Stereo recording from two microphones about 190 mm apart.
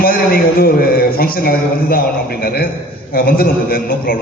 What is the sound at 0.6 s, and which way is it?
A man's voice, 50° left (ahead or behind).